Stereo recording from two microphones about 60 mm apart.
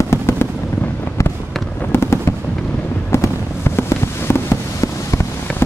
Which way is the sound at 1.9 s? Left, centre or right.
Left.